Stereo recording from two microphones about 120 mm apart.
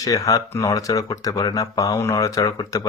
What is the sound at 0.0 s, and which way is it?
Speech, 30° left (ahead or behind).